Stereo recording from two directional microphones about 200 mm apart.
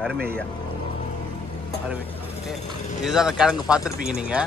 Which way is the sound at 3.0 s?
Centre (ahead or behind).